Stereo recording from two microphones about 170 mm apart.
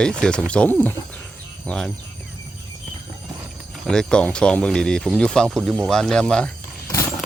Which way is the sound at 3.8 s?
5° left (ahead or behind).